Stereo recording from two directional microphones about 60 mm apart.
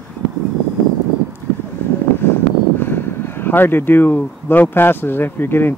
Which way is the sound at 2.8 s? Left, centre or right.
Left.